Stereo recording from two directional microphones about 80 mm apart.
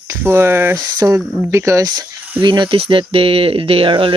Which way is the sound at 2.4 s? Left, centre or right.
Right.